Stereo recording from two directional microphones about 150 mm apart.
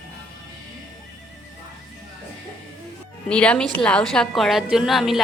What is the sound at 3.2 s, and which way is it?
A woman's voice, 5° left (ahead or behind).